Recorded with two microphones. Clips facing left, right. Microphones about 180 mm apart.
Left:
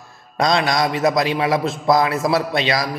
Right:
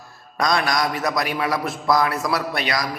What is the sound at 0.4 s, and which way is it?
Mantra, 25° left (ahead or behind).